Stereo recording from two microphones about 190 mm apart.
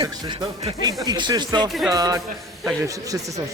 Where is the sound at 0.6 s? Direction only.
30° right (ahead or behind).